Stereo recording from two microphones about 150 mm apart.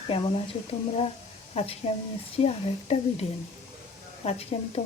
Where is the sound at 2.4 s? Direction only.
45° left (ahead or behind).